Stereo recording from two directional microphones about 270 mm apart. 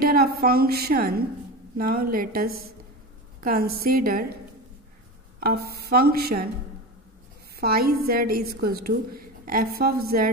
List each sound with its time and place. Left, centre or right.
0.0 s a woman's voice: right
5.4 s a sound: right
5.9 s a woman's voice: right
7.6 s a woman's voice: right